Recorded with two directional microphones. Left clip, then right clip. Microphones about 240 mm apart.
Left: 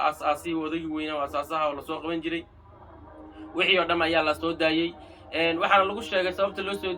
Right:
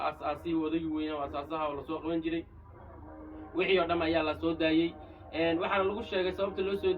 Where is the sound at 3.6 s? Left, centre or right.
Left.